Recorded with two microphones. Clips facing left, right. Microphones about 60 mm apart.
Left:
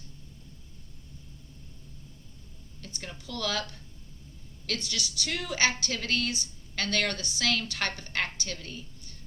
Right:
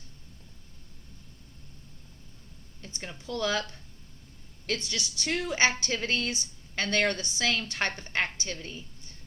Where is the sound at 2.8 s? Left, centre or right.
Right.